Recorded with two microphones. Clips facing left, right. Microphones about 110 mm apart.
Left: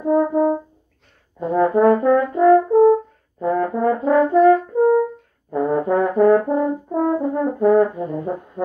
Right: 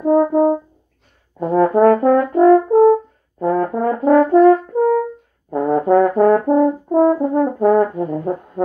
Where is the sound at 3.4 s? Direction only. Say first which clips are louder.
Right 1 dB; 45° right (ahead or behind).